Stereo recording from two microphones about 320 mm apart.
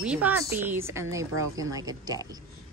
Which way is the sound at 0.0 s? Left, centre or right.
Centre.